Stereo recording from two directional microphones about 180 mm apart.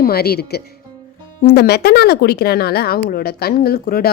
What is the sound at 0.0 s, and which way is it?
Speech, 60° left (ahead or behind).